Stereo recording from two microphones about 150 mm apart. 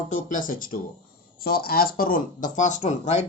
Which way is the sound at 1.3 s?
90° left.